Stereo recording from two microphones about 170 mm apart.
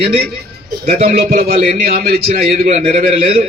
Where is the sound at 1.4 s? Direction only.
60° right (ahead or behind).